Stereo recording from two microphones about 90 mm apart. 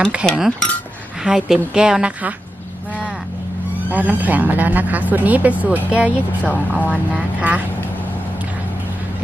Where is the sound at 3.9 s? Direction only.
20° right (ahead or behind).